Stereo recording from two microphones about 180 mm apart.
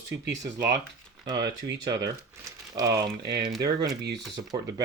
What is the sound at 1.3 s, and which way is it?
Speech, 75° right (ahead or behind).